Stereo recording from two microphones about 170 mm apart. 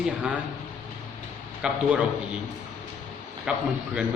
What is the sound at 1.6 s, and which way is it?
Speech, 10° right (ahead or behind).